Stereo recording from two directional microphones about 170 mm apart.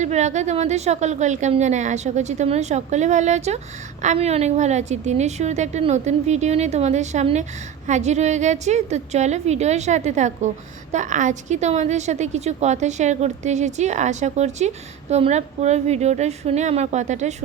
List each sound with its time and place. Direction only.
0.0 s a woman's voice: 45° right (ahead or behind)